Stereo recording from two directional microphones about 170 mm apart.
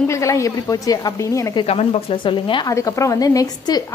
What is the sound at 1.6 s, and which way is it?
A woman's voice, 35° left (ahead or behind).